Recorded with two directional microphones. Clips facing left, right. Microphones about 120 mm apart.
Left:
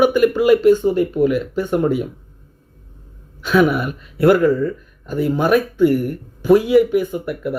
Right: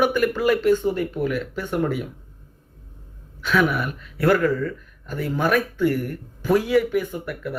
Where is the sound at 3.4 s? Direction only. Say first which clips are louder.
Left 6 dB; 20° left (ahead or behind).